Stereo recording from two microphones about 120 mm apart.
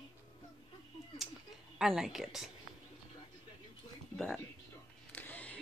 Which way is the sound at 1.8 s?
5° right (ahead or behind).